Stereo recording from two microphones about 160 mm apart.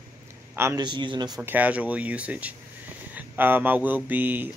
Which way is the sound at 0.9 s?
30° right (ahead or behind).